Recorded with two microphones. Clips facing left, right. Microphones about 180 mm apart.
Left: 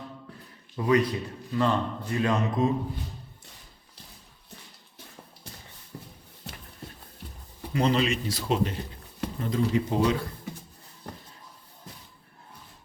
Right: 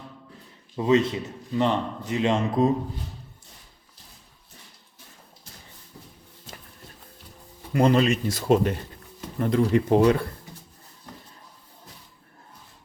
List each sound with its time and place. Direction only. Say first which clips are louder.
0.8 s a man's voice: right 3 dB; 25° right (ahead or behind)
6.5 s a sound: left 2 dB; 70° left (ahead or behind)
7.7 s speech: right 5 dB; 50° right (ahead or behind)
9.4 s speech: right 5 dB; 60° right (ahead or behind)